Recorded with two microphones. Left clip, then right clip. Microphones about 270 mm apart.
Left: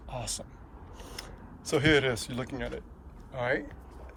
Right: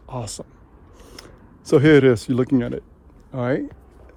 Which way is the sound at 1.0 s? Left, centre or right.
Right.